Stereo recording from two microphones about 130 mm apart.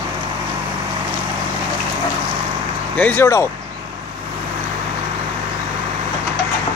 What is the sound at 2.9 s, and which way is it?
Speech, 15° left (ahead or behind).